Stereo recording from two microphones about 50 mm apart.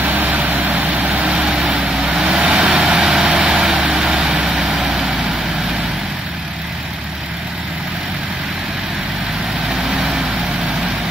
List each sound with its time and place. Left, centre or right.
0.0 s vehicle: right
1.2 s vehicle: centre
9.8 s vehicle: centre